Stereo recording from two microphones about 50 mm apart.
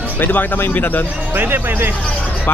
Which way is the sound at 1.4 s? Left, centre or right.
Right.